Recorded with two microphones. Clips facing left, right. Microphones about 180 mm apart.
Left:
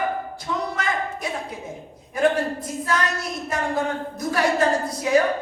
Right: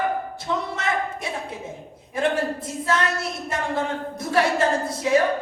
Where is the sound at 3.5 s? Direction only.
25° right (ahead or behind).